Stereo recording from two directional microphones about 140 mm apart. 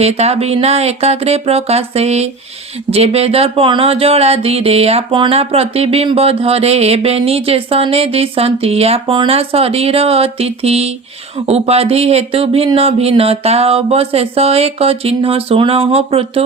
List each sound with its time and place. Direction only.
0.0 s speech: 50° right (ahead or behind)